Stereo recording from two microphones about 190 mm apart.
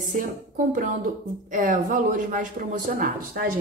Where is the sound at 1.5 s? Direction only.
45° right (ahead or behind).